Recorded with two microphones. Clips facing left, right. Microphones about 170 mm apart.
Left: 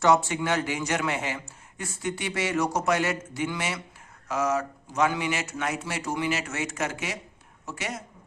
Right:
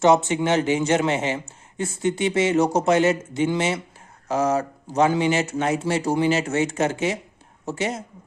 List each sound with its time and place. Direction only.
0.0 s a woman's voice: 20° right (ahead or behind)